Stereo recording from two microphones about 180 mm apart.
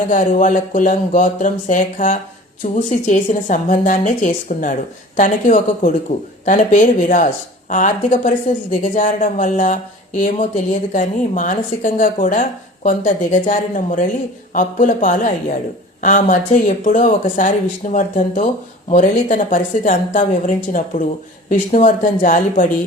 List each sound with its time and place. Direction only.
0.1 s a woman's voice: 45° left (ahead or behind)